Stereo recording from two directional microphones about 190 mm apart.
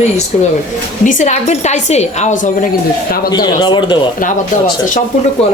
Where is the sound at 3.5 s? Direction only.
25° left (ahead or behind).